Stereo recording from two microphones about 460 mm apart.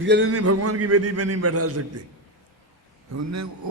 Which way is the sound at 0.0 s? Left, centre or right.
Right.